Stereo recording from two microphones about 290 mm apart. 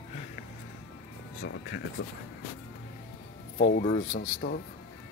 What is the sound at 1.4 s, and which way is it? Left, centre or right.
Speech, left.